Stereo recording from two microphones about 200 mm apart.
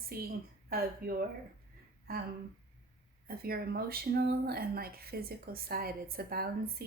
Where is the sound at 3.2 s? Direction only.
50° right (ahead or behind).